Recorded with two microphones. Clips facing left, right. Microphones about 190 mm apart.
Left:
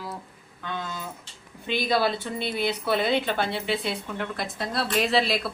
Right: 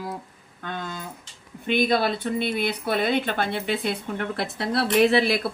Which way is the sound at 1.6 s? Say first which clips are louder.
Right 3 dB; 55° right (ahead or behind).